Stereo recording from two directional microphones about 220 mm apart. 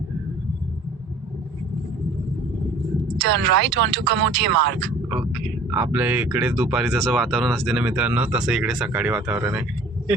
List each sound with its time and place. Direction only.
3.2 s speech: 55° right (ahead or behind)
5.0 s speech: 5° right (ahead or behind)